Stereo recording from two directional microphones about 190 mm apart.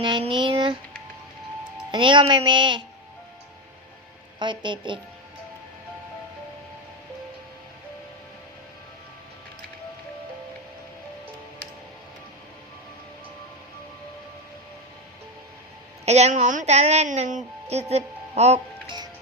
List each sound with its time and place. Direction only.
0.0 s speech: 25° right (ahead or behind)
1.9 s speech: 25° right (ahead or behind)
4.4 s speech: 25° right (ahead or behind)
16.0 s a woman's voice: 35° right (ahead or behind)